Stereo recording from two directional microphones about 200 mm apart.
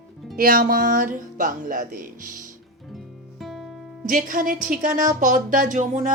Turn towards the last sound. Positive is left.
turn(degrees=-40)  # may be behind; listen again after turning